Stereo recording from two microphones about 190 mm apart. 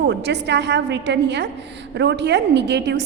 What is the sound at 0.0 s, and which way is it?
A woman's voice, 65° right (ahead or behind).